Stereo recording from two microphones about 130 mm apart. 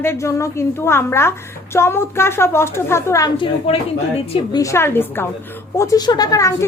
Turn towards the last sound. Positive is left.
turn(degrees=25)  # may be behind; listen again after turning